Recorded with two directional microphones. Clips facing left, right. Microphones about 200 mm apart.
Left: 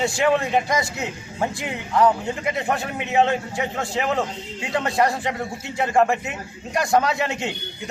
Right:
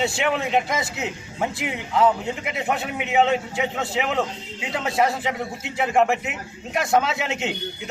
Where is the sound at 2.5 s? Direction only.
5° right (ahead or behind).